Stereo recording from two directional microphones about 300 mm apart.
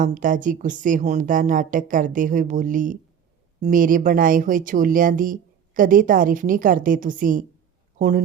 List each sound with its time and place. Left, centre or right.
0.0 s speech: right